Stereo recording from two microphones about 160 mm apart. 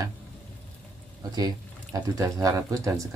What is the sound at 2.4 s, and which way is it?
Speech, 20° right (ahead or behind).